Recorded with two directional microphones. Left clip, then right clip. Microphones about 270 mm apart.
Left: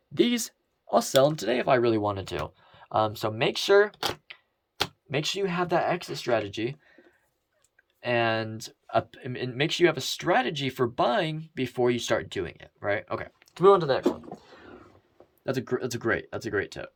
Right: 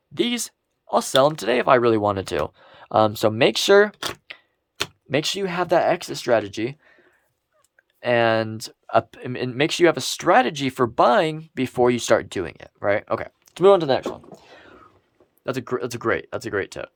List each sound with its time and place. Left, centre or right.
0.1 s speech: centre
8.0 s speech: centre
15.4 s speech: centre